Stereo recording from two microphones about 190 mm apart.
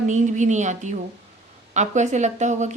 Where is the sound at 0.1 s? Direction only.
40° right (ahead or behind).